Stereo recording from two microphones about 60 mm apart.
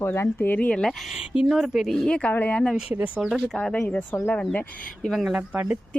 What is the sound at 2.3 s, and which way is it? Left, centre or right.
Speech, left.